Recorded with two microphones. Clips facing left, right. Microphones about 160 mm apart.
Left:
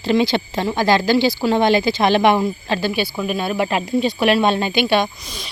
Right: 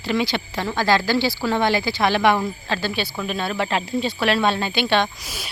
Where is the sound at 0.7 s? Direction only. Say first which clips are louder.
Left 3 dB; 15° left (ahead or behind).